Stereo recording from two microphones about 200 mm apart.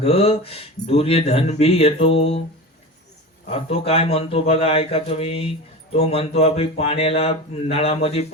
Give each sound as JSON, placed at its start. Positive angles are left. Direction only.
{"t": 0.0, "sound": "a man's voice", "side_deg": 30}
{"t": 3.5, "sound": "a man's voice", "side_deg": 30}